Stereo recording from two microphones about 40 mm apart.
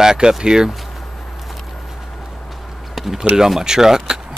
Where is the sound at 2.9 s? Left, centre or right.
Centre.